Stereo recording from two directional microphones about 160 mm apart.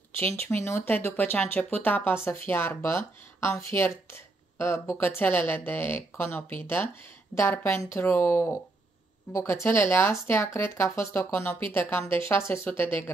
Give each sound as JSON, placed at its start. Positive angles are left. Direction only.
{"t": 0.2, "sound": "speech", "side_deg": 15}